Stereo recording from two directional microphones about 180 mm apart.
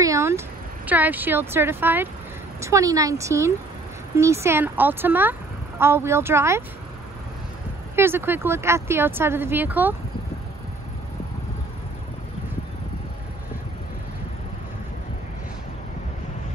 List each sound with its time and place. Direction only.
0.0 s a sound: 15° right (ahead or behind)
0.8 s speech: 10° right (ahead or behind)
7.9 s speech: 15° right (ahead or behind)